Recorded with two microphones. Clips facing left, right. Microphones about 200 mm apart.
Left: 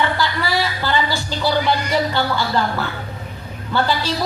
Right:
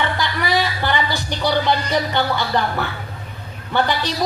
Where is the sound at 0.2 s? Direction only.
20° right (ahead or behind).